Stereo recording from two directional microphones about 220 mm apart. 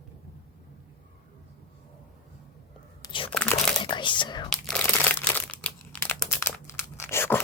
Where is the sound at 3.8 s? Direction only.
20° left (ahead or behind).